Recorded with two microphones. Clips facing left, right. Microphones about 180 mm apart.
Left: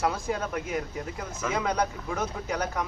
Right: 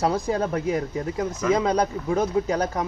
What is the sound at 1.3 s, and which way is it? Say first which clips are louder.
Speech: right 7 dB; 15° right (ahead or behind).